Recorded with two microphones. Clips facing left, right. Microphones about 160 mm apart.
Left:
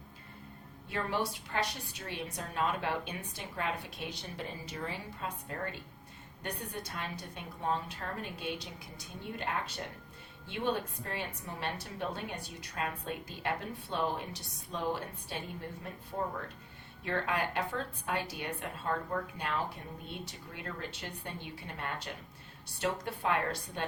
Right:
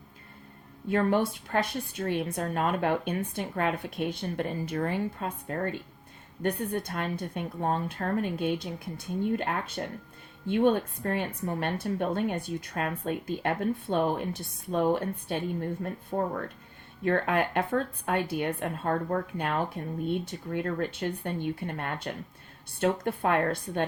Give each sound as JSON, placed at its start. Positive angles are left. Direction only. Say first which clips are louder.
{"t": 0.9, "sound": "a woman's voice", "louder": "right 9 dB", "side_deg": -50}